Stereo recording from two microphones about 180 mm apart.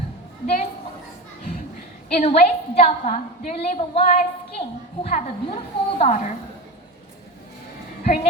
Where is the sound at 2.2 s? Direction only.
35° left (ahead or behind).